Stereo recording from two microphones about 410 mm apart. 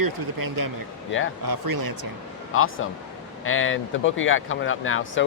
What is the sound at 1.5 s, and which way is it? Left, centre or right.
Speech, right.